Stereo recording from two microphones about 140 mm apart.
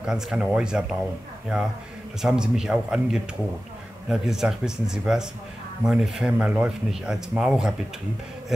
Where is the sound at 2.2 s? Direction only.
5° right (ahead or behind).